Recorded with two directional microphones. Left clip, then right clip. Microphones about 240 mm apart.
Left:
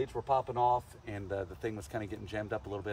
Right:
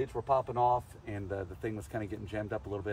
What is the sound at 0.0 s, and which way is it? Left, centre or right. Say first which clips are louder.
Speech: right 1 dB; centre.